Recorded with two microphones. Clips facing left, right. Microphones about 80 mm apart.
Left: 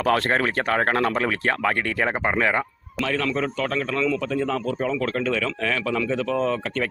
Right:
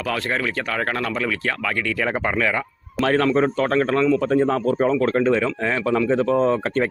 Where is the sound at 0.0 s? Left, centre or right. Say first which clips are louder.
Left 3 dB; left.